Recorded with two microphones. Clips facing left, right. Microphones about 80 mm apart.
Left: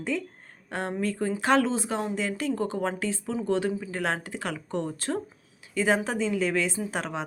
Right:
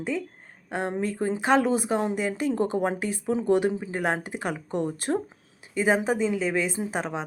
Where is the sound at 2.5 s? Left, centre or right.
Right; by 7.2 s centre.